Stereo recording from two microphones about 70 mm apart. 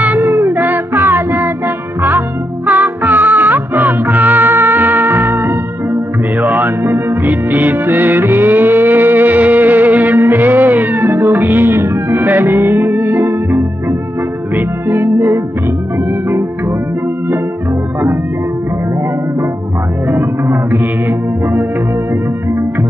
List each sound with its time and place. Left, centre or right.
0.0 s music: right
20.1 s music: right